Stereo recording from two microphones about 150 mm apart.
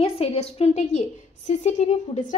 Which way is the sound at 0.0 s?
45° left (ahead or behind).